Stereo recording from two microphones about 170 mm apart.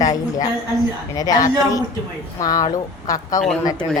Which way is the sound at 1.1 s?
20° left (ahead or behind).